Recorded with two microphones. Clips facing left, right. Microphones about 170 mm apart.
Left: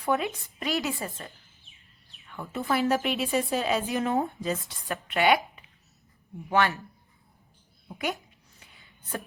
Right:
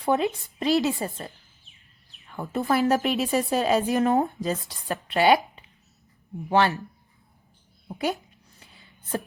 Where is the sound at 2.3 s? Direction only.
40° right (ahead or behind).